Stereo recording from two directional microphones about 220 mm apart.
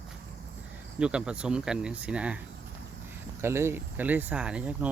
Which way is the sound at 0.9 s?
5° right (ahead or behind).